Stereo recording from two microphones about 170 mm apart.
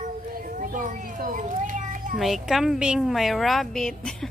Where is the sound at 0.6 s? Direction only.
50° right (ahead or behind).